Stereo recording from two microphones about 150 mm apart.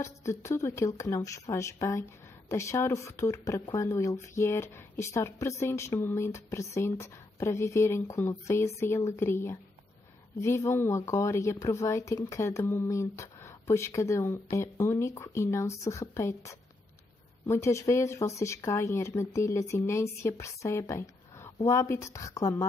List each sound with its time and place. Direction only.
0.0 s speech: 20° left (ahead or behind)